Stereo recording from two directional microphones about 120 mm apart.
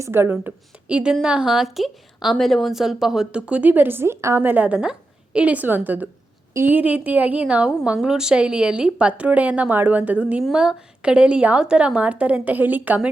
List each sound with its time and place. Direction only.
0.0 s a woman's voice: 20° right (ahead or behind)